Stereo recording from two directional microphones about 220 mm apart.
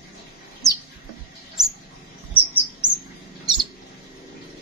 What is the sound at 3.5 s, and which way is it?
Bird, 20° right (ahead or behind).